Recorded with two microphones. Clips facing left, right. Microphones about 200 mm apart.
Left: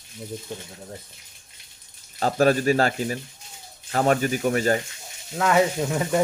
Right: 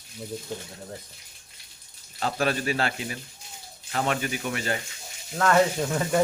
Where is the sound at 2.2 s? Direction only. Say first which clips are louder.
Left 7 dB; 40° left (ahead or behind).